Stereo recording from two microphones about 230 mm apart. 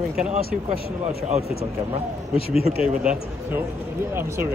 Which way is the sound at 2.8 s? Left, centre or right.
Centre.